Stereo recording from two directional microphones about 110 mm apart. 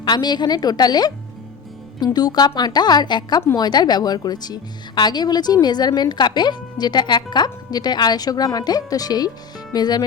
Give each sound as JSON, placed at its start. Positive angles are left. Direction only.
{"t": 0.0, "sound": "a woman's voice", "side_deg": 40}
{"t": 2.1, "sound": "a woman's voice", "side_deg": 40}